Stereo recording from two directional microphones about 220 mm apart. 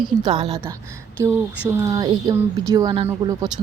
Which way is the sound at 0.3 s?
25° right (ahead or behind).